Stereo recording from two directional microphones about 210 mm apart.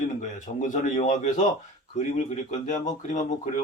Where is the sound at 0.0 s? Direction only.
35° left (ahead or behind).